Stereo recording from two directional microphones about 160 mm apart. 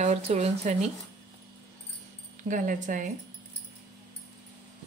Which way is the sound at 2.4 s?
55° right (ahead or behind).